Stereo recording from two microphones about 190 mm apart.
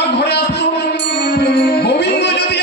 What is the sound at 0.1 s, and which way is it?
Music, 60° left (ahead or behind).